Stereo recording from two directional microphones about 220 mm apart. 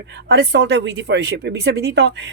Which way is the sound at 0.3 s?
50° right (ahead or behind).